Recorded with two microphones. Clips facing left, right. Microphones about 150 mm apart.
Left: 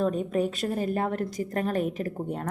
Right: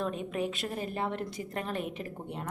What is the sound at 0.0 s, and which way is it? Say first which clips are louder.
A woman's voice: left 7 dB; 40° left (ahead or behind).